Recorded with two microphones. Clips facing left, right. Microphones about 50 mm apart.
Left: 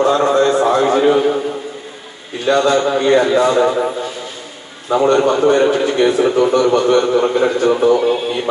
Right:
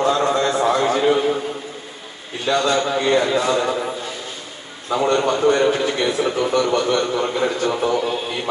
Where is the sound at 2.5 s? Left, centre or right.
Left.